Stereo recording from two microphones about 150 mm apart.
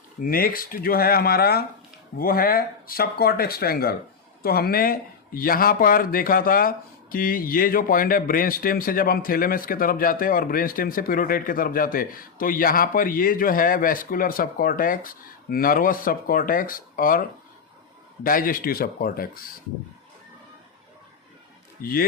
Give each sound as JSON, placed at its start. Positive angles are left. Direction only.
{"t": 0.2, "sound": "speech", "side_deg": 75}
{"t": 2.1, "sound": "speech", "side_deg": 75}
{"t": 21.8, "sound": "speech", "side_deg": 80}